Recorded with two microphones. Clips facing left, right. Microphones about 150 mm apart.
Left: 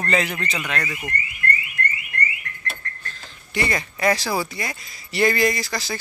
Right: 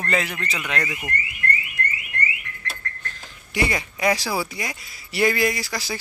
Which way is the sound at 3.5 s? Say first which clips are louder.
Even; 10° right (ahead or behind).